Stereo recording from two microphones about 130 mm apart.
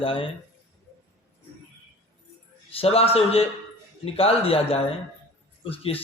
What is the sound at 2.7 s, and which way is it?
A man's voice, 50° left (ahead or behind).